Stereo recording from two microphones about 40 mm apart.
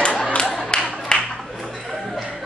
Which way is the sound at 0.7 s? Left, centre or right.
Left.